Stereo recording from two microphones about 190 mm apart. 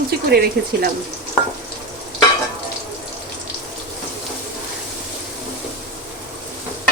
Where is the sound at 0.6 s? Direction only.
60° right (ahead or behind).